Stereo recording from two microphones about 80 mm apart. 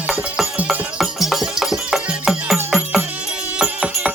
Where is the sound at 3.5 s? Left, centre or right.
Centre.